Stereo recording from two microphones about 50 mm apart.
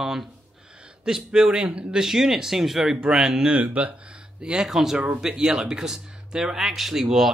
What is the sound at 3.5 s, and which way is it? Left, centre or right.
Speech, right.